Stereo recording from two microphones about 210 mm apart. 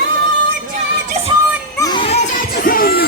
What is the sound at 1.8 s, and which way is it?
Music, 25° left (ahead or behind).